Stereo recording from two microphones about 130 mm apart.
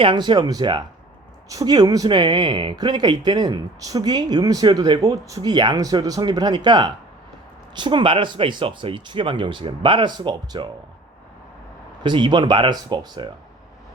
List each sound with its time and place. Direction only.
0.0 s speech: 40° right (ahead or behind)
12.0 s speech: 35° right (ahead or behind)